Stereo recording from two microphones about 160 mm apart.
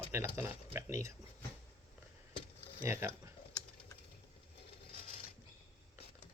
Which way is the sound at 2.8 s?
15° right (ahead or behind).